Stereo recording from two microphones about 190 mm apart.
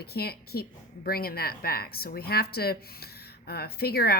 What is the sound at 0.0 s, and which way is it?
A woman's voice, 55° left (ahead or behind).